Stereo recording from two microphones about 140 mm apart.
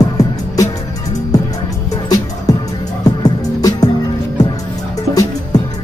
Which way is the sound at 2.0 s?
25° left (ahead or behind).